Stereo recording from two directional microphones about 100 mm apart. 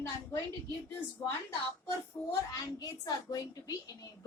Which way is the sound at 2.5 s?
35° left (ahead or behind).